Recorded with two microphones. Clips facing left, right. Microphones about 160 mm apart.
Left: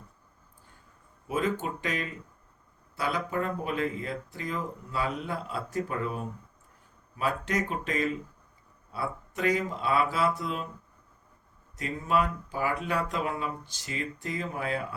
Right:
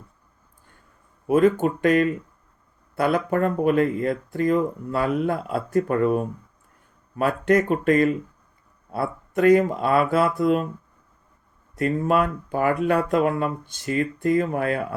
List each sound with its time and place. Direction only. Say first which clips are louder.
1.3 s speech: right 12 dB; 55° right (ahead or behind)
11.8 s speech: right 7 dB; 55° right (ahead or behind)